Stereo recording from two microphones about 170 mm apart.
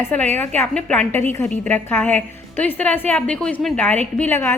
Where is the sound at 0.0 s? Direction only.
10° left (ahead or behind).